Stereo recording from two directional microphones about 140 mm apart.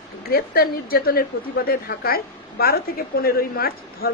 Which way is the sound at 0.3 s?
90° left.